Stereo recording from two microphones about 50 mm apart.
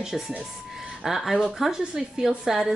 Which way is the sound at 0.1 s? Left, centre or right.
Centre.